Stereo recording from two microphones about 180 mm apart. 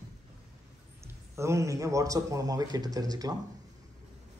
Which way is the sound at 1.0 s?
15° right (ahead or behind).